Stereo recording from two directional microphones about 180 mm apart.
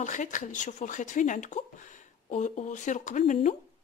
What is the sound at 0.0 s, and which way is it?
Speech, 45° left (ahead or behind).